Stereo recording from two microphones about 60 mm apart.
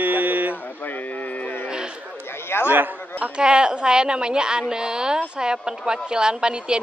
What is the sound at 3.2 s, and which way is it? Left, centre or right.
A woman's voice, centre.